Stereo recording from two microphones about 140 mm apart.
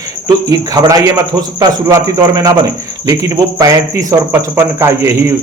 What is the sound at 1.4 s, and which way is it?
Speech, 25° right (ahead or behind).